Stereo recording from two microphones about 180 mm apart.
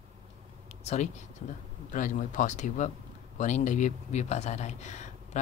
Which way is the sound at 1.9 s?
45° left (ahead or behind).